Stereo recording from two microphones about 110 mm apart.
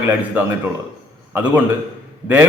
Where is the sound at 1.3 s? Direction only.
15° right (ahead or behind).